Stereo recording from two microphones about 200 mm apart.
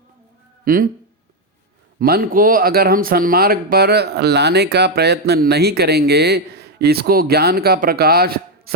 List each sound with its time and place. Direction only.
0.6 s speech: 45° right (ahead or behind)
2.0 s speech: 50° right (ahead or behind)